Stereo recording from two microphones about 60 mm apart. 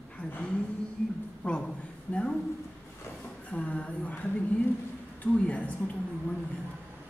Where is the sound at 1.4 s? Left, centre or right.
Left.